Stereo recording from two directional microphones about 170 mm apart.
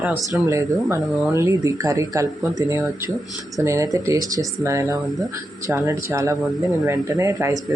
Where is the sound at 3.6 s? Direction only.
15° right (ahead or behind).